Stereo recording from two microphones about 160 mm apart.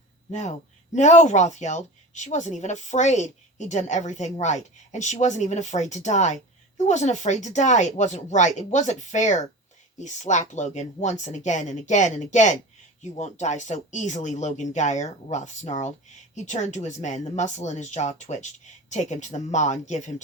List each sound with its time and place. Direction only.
0.3 s a woman's voice: 45° left (ahead or behind)